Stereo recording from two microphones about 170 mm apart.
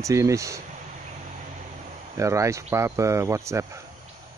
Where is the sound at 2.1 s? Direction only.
20° right (ahead or behind).